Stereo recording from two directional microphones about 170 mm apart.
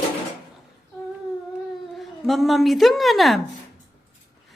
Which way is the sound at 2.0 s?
Centre (ahead or behind).